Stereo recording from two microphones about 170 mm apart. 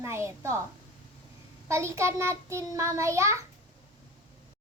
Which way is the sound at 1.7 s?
15° right (ahead or behind).